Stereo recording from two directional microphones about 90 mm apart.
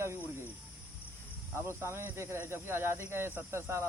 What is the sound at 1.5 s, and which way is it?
Speech, 30° right (ahead or behind).